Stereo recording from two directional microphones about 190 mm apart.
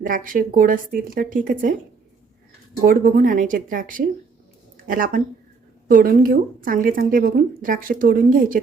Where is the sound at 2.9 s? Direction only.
45° right (ahead or behind).